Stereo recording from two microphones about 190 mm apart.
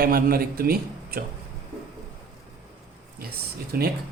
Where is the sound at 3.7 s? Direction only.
50° right (ahead or behind).